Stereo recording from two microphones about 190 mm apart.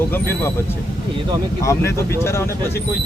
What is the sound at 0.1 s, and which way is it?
Speech, 10° left (ahead or behind).